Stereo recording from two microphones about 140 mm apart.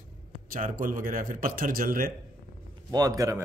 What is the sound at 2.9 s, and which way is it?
Speech, 25° right (ahead or behind).